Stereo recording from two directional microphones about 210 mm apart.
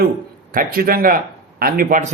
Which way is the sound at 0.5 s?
45° right (ahead or behind).